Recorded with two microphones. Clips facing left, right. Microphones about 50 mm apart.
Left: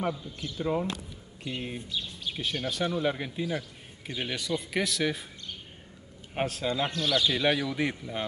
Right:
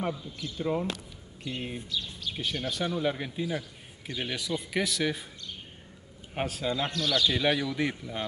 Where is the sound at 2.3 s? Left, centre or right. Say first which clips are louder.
Left 1 dB; centre.